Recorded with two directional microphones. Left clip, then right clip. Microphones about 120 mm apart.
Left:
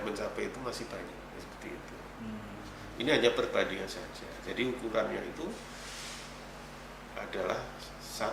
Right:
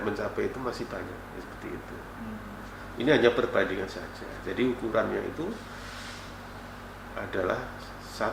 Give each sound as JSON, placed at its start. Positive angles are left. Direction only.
{"t": 0.0, "sound": "speech", "side_deg": 30}
{"t": 3.0, "sound": "speech", "side_deg": 30}
{"t": 7.4, "sound": "speech", "side_deg": 25}